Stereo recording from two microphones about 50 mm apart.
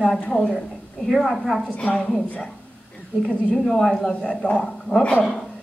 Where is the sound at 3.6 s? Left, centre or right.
Centre.